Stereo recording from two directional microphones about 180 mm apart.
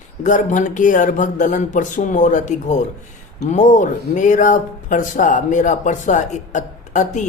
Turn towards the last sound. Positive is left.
turn(degrees=45)  # may be behind; listen again after turning